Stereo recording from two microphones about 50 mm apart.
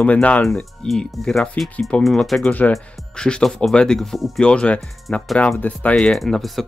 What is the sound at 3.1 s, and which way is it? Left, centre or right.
Speech, centre.